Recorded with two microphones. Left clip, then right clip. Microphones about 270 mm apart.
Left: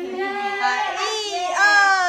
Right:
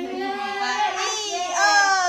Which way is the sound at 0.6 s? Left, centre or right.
Centre.